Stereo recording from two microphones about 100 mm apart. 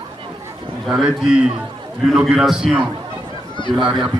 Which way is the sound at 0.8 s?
5° right (ahead or behind).